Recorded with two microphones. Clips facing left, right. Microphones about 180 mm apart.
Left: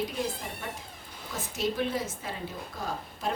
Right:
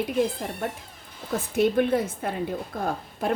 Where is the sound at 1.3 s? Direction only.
55° right (ahead or behind).